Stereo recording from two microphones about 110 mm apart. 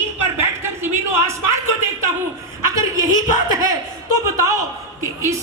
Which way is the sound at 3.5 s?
30° right (ahead or behind).